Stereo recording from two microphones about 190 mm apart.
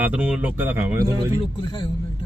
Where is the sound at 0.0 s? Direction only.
10° right (ahead or behind).